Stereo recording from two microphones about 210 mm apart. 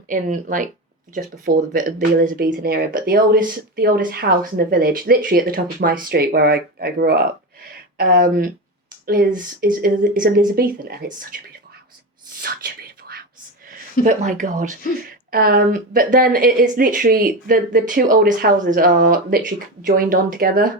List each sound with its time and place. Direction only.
0.1 s speech: 40° right (ahead or behind)
12.3 s a sound: 45° right (ahead or behind)
14.0 s speech: 35° right (ahead or behind)